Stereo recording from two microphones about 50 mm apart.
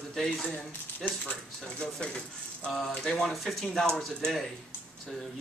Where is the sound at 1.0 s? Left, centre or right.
Centre.